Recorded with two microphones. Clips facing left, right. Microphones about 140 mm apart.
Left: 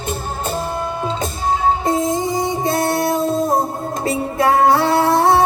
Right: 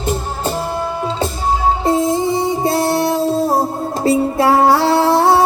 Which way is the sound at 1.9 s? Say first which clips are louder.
Right 3 dB; 30° right (ahead or behind).